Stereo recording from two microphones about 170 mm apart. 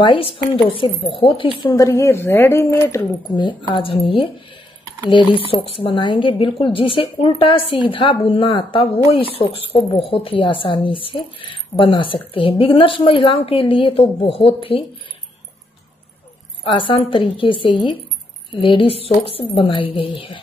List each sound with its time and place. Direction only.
0.0 s a woman's voice: 30° left (ahead or behind)
5.5 s a woman's voice: 30° left (ahead or behind)
16.6 s a woman's voice: 30° left (ahead or behind)